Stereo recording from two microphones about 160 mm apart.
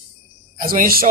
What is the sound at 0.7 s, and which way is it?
Speech, 65° right (ahead or behind).